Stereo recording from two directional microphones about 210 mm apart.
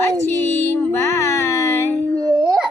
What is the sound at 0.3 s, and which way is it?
Music, 10° left (ahead or behind).